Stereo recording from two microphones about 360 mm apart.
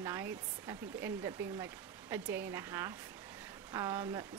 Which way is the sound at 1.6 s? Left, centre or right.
Centre.